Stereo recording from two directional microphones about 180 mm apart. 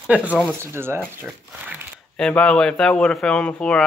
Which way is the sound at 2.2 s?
5° left (ahead or behind).